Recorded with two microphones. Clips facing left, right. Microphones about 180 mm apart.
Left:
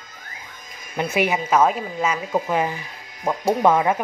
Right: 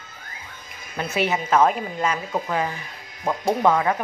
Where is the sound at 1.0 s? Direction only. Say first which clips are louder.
Left 2 dB; 15° left (ahead or behind).